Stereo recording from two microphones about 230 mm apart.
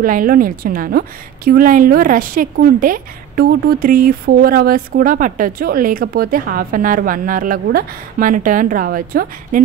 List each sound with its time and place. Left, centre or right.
0.0 s a woman's voice: right